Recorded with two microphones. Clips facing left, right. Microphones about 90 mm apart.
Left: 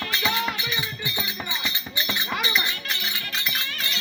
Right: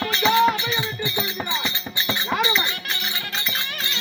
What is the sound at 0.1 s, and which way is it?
Music, 25° right (ahead or behind).